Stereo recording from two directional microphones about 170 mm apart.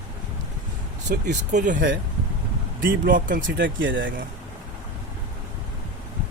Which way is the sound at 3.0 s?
55° right (ahead or behind).